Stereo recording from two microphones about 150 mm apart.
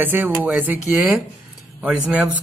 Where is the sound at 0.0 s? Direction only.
10° right (ahead or behind).